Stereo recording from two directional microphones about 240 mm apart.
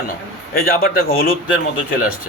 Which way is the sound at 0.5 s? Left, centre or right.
Left.